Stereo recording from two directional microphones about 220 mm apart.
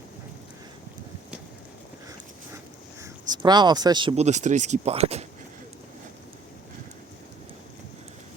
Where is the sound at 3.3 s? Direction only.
20° right (ahead or behind).